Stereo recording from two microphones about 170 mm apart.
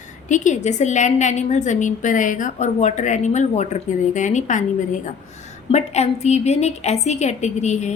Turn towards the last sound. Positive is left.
turn(degrees=40)  # may be behind; listen again after turning